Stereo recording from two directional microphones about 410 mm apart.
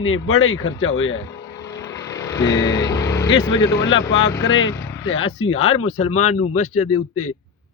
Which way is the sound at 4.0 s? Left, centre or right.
Centre.